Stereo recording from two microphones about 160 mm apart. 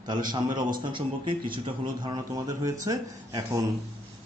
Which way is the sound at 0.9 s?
30° right (ahead or behind).